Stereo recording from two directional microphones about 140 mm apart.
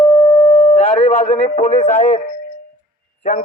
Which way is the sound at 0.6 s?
45° left (ahead or behind).